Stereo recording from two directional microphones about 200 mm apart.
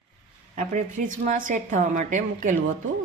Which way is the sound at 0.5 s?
40° right (ahead or behind).